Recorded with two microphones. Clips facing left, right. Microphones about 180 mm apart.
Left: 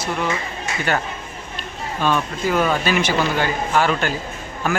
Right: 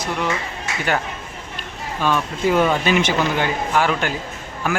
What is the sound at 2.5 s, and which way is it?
Speech, 5° left (ahead or behind).